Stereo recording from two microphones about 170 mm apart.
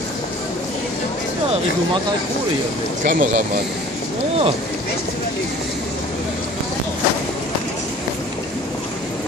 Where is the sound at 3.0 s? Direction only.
55° right (ahead or behind).